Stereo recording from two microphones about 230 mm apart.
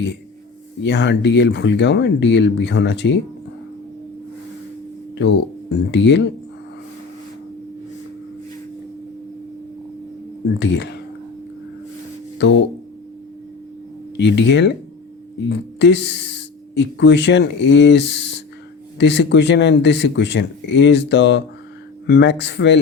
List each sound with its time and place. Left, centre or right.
0.8 s speech: left
5.1 s speech: left
10.6 s speech: left
12.4 s speech: left
14.2 s speech: left